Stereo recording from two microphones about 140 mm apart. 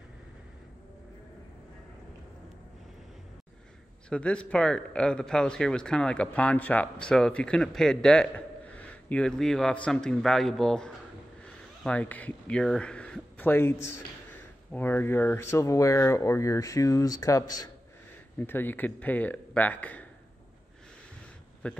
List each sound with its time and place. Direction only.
4.1 s speech: 10° left (ahead or behind)
21.6 s speech: 10° left (ahead or behind)